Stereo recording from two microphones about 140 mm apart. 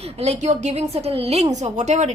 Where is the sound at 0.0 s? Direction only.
50° right (ahead or behind).